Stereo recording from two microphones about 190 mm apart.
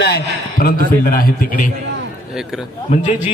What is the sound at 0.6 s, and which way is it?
A man's voice, 50° left (ahead or behind).